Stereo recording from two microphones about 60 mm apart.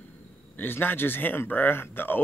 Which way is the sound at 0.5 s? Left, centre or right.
Left.